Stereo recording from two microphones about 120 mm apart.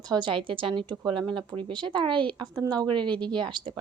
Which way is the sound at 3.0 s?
10° left (ahead or behind).